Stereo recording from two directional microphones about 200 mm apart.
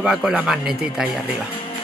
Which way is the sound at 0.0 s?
5° right (ahead or behind).